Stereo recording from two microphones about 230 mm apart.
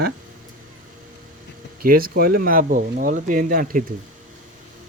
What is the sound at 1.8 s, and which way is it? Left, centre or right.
Speech, right.